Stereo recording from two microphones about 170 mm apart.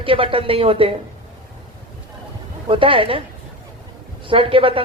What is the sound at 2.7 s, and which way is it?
Speech, 30° right (ahead or behind).